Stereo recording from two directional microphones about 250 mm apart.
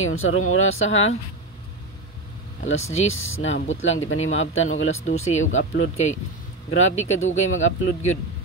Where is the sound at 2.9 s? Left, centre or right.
Left.